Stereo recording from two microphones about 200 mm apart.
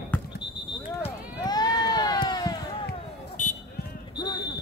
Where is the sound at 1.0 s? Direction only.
20° left (ahead or behind).